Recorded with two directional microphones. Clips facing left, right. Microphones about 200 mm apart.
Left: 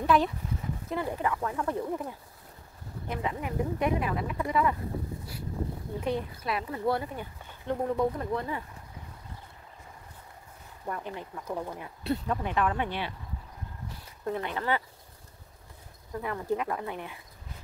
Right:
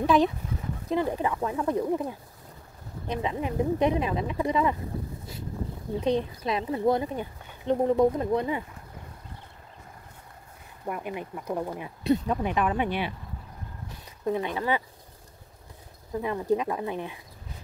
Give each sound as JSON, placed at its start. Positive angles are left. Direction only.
{"t": 0.0, "sound": "speech", "side_deg": -15}
{"t": 5.9, "sound": "speech", "side_deg": -20}
{"t": 10.9, "sound": "speech", "side_deg": -15}
{"t": 14.2, "sound": "speech", "side_deg": -15}
{"t": 16.1, "sound": "speech", "side_deg": -20}